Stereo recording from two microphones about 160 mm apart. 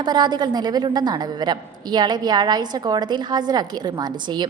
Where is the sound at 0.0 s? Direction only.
25° right (ahead or behind).